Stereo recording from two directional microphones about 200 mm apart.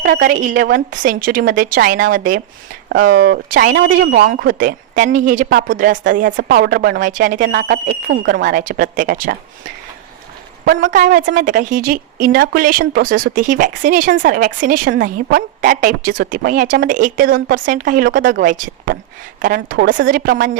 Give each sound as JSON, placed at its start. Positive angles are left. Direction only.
{"t": 0.0, "sound": "a woman's voice", "side_deg": -50}
{"t": 7.4, "sound": "a woman's voice", "side_deg": -55}
{"t": 10.7, "sound": "a woman's voice", "side_deg": -65}
{"t": 10.9, "sound": "a woman's voice", "side_deg": -45}